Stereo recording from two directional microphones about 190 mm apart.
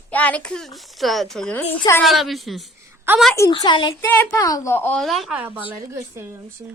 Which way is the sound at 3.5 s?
25° left (ahead or behind).